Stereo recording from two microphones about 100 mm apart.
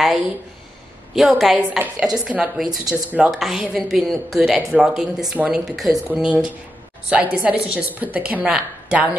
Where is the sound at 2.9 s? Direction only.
10° right (ahead or behind).